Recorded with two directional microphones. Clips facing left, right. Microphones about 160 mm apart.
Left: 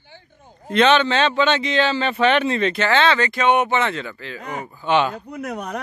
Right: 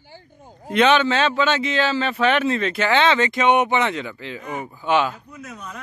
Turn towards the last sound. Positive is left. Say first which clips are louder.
# left 9 dB
turn(degrees=70)  # may be behind; listen again after turning